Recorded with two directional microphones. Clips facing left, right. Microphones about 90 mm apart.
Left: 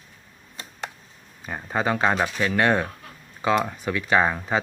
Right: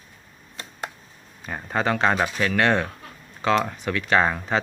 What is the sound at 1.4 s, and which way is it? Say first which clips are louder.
Speech: right 1 dB; 5° left (ahead or behind).